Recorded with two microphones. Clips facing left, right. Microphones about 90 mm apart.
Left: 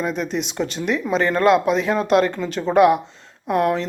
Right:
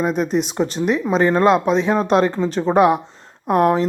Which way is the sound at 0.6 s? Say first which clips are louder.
Right 4 dB; 20° right (ahead or behind).